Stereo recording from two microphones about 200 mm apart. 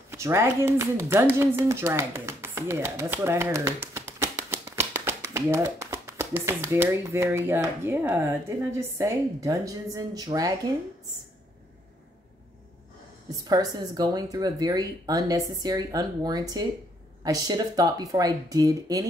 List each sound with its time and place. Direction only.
0.1 s a woman's voice: 15° right (ahead or behind)
13.3 s speech: 20° right (ahead or behind)